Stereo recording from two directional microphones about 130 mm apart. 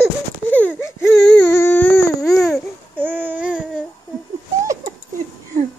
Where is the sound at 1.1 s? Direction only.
10° left (ahead or behind).